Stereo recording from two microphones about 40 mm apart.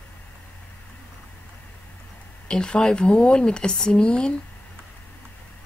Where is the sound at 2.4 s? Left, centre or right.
Left.